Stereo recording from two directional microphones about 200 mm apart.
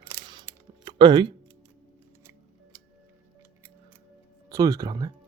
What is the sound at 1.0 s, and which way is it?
Speech, 25° right (ahead or behind).